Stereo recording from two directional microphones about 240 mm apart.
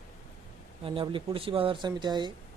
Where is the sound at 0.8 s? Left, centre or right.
Right.